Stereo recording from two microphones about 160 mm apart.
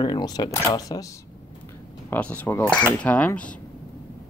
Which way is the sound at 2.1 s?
10° left (ahead or behind).